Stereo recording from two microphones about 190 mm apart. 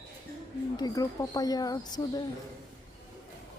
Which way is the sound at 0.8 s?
20° left (ahead or behind).